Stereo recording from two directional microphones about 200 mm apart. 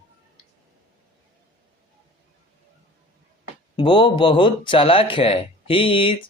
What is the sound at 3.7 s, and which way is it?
Speech, 25° left (ahead or behind).